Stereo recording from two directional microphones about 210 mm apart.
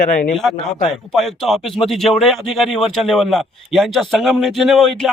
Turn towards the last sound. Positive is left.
turn(degrees=0)  # may be behind; listen again after turning